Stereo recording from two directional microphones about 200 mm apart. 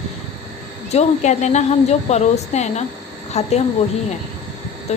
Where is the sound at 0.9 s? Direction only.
35° left (ahead or behind).